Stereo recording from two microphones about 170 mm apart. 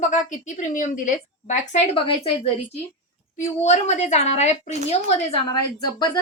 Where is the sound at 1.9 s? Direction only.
30° left (ahead or behind).